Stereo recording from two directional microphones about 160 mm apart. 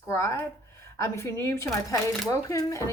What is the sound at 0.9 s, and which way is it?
A woman's voice, 20° left (ahead or behind).